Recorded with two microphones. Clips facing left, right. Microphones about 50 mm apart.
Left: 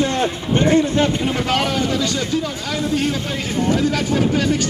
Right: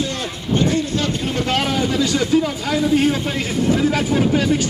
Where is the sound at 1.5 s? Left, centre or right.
Centre.